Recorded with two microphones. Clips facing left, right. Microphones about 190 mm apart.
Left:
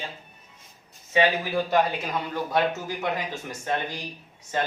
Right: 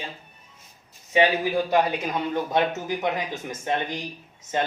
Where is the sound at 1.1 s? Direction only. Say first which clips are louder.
Right 2 dB; 15° right (ahead or behind).